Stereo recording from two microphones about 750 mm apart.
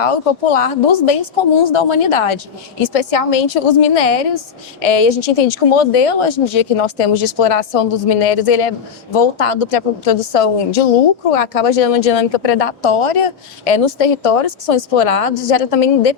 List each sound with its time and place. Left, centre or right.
0.0 s a woman's voice: left